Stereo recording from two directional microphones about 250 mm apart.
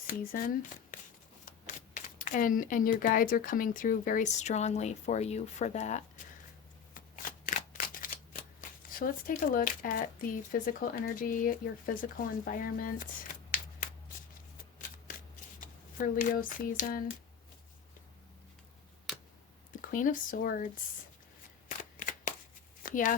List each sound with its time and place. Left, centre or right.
0.1 s speech: left
6.9 s shuffling cards: left
8.9 s speech: left
15.6 s speech: left
19.8 s speech: left
21.7 s shuffling cards: left
22.8 s a sound: left